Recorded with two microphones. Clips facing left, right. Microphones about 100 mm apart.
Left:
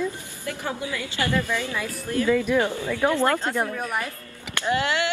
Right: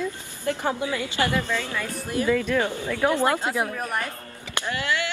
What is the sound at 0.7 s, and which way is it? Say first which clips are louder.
Speech: right 3 dB; 20° right (ahead or behind).